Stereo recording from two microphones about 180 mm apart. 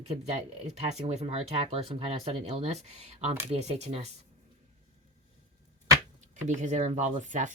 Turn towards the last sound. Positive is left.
turn(degrees=-45)  # may be behind; listen again after turning